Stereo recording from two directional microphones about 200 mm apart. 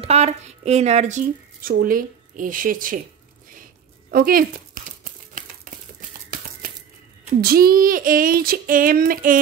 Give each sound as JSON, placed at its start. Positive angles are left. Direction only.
{"t": 0.0, "sound": "speech", "side_deg": -30}
{"t": 4.1, "sound": "female singing", "side_deg": -45}
{"t": 5.9, "sound": "a sound", "side_deg": -45}
{"t": 7.4, "sound": "female singing", "side_deg": -45}